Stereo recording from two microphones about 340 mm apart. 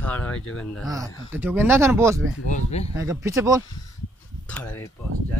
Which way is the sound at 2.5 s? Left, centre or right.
Centre.